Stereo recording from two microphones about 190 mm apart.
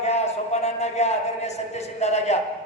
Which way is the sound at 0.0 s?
35° left (ahead or behind).